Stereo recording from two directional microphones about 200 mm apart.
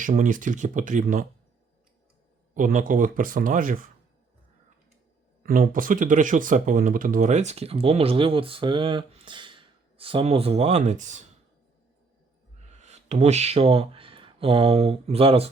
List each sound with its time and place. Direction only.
0.0 s speech: 40° right (ahead or behind)
2.6 s speech: 40° right (ahead or behind)
5.4 s speech: 45° right (ahead or behind)
12.5 s speech: 35° right (ahead or behind)